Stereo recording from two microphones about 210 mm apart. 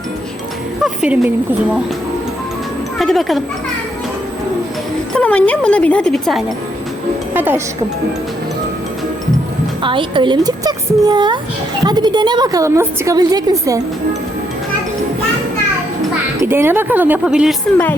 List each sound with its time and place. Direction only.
0.8 s speech: 5° right (ahead or behind)
3.0 s speech: centre (ahead or behind)
5.1 s speech: 5° left (ahead or behind)
7.3 s a woman's voice: 10° right (ahead or behind)
9.8 s a woman's voice: 25° right (ahead or behind)
16.4 s a woman's voice: 10° right (ahead or behind)